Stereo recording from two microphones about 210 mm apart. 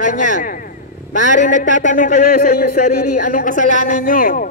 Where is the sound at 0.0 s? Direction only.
40° left (ahead or behind).